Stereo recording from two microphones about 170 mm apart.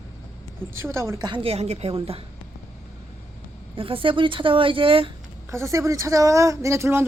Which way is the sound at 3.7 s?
30° right (ahead or behind).